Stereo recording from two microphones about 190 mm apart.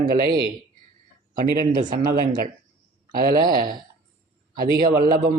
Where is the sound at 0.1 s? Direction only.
50° right (ahead or behind).